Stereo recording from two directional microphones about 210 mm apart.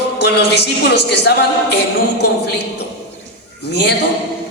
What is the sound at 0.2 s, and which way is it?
A woman's voice, 55° left (ahead or behind).